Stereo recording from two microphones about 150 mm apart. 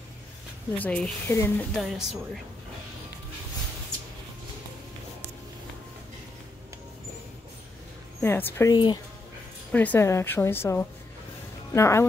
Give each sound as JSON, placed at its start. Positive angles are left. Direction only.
{"t": 0.7, "sound": "speech", "side_deg": 10}
{"t": 1.8, "sound": "speech", "side_deg": 0}
{"t": 8.2, "sound": "speech", "side_deg": 15}
{"t": 8.7, "sound": "speech", "side_deg": 30}
{"t": 9.7, "sound": "speech", "side_deg": 10}